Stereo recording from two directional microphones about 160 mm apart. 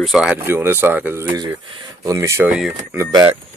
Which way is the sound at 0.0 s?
5° right (ahead or behind).